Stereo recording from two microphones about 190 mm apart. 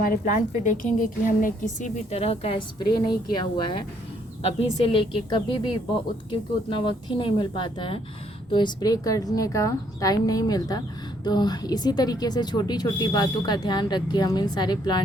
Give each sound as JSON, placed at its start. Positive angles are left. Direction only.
{"t": 0.0, "sound": "a woman's voice", "side_deg": 45}